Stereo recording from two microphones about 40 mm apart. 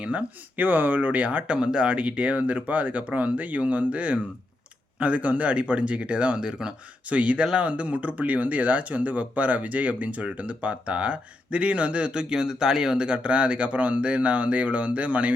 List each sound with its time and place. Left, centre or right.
0.0 s speech: right
0.5 s speech: right
1.5 s speech: right
6.3 s speech: centre
7.1 s speech: right
12.3 s speech: centre; by 15.3 s right